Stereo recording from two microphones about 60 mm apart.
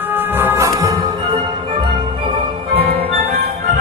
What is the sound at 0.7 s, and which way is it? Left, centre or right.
Music, right.